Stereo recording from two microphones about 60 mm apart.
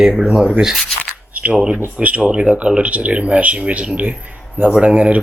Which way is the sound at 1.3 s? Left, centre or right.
Right.